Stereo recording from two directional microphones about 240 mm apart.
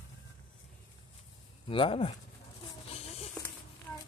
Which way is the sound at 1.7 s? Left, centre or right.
Left.